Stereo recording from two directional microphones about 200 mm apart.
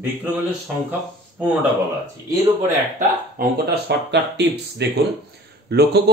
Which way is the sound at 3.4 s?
55° right (ahead or behind).